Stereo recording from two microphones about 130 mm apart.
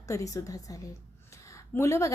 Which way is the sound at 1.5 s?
25° left (ahead or behind).